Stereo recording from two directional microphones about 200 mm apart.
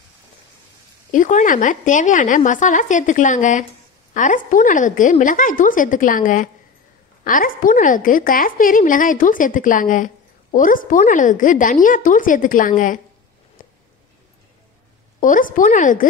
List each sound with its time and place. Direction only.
1.1 s a woman's voice: 40° left (ahead or behind)
13.6 s a sound: 40° left (ahead or behind)
15.1 s a woman's voice: 40° left (ahead or behind)